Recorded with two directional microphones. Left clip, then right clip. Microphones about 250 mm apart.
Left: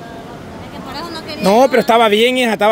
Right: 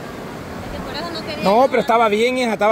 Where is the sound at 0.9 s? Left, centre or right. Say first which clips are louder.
Left 1 dB; left.